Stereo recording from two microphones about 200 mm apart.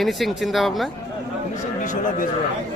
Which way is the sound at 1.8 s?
40° left (ahead or behind).